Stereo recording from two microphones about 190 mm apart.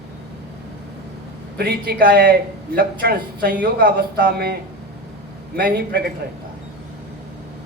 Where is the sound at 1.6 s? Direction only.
50° right (ahead or behind).